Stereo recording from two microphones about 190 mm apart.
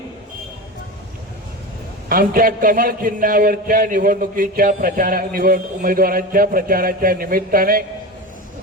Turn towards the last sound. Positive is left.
turn(degrees=-50)  # may be behind; listen again after turning